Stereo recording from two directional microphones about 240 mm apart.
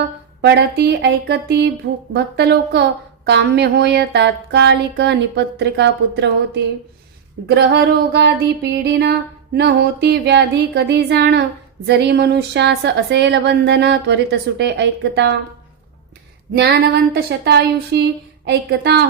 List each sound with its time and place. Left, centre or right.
0.4 s speech: right
16.5 s speech: right